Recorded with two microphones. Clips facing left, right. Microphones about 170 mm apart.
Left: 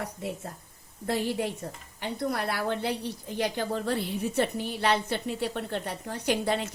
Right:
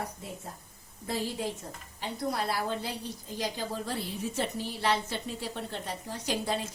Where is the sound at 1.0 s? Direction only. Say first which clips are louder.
Left 4 dB; 65° left (ahead or behind).